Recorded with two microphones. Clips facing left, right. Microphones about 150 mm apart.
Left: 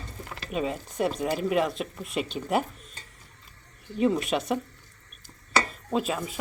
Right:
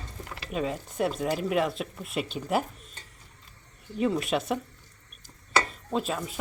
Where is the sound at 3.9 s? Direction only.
Centre (ahead or behind).